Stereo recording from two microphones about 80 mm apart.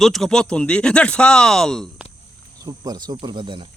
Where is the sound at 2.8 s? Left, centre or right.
Right.